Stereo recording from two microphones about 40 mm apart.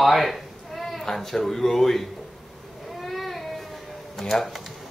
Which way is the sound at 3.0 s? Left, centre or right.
Centre.